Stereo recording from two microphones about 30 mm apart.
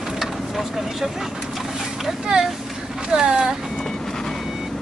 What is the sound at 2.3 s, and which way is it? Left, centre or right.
Speech, right.